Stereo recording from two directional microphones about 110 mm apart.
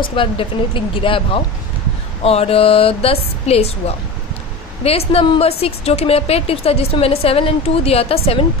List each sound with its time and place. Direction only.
0.0 s speech: 50° left (ahead or behind)
2.2 s speech: 65° left (ahead or behind)